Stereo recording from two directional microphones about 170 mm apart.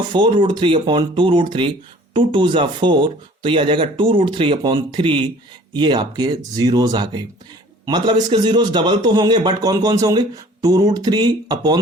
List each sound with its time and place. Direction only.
0.1 s a man's voice: 30° right (ahead or behind)